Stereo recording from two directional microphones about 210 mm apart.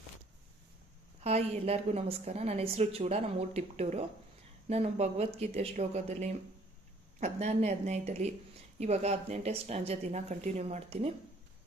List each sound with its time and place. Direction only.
1.2 s a woman's voice: 30° right (ahead or behind)